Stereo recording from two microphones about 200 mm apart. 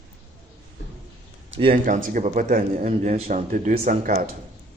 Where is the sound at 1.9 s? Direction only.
40° right (ahead or behind).